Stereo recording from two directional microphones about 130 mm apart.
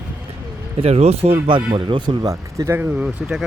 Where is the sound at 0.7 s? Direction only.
50° right (ahead or behind).